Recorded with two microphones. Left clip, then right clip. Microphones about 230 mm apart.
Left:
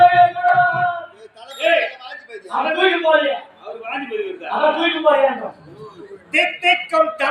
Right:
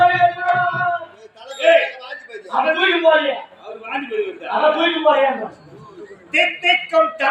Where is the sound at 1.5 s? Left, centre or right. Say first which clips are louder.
Right 3 dB; centre.